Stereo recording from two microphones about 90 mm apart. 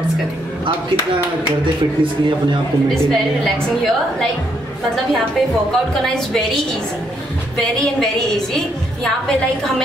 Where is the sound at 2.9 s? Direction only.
5° left (ahead or behind).